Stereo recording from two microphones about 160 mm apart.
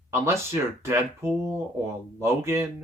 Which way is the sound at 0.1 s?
15° right (ahead or behind).